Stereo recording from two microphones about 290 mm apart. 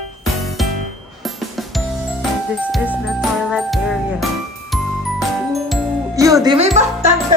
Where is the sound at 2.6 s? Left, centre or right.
Centre.